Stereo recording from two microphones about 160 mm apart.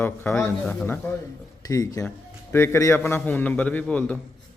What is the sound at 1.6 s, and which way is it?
Speech, 20° left (ahead or behind).